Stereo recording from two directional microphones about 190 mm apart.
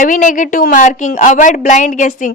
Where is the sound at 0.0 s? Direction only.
45° left (ahead or behind).